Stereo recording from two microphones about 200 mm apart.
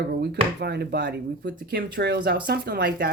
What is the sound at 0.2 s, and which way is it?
Speech, 55° right (ahead or behind).